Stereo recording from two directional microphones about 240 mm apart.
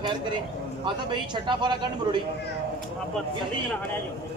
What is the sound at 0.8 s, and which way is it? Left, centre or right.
A man's voice, centre.